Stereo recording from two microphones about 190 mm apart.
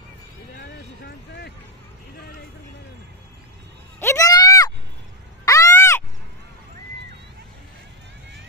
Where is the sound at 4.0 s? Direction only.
15° left (ahead or behind).